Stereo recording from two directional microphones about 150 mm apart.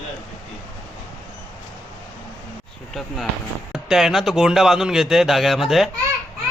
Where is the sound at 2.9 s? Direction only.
Centre (ahead or behind).